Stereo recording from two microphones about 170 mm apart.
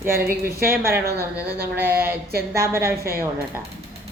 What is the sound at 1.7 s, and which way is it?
Speech, 10° right (ahead or behind).